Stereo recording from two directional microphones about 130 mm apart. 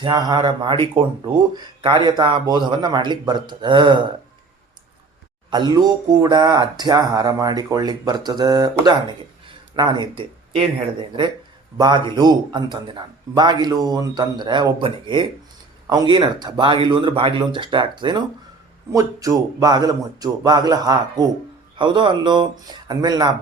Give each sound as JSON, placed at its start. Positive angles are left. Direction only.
{"t": 0.0, "sound": "speech", "side_deg": -30}
{"t": 5.5, "sound": "speech", "side_deg": -30}
{"t": 11.8, "sound": "speech", "side_deg": -35}
{"t": 18.9, "sound": "speech", "side_deg": -25}